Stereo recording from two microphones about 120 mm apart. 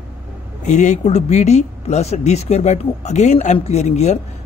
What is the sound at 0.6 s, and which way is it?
Speech, 80° left.